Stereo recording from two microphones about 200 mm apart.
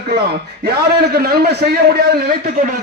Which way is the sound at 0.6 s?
50° right (ahead or behind).